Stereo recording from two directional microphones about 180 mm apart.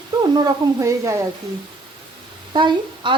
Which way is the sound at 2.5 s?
25° right (ahead or behind).